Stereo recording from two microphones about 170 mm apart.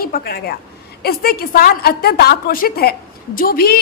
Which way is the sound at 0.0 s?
65° left (ahead or behind).